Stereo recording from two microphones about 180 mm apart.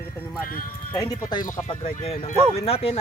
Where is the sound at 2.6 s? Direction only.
35° left (ahead or behind).